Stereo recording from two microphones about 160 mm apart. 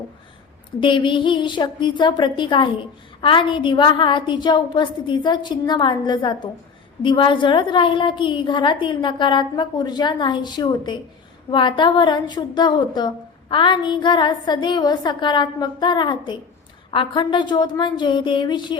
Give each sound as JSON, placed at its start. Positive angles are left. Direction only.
{"t": 0.8, "sound": "a woman's voice", "side_deg": 30}